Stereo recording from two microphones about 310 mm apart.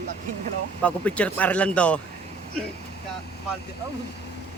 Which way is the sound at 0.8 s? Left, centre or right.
Centre.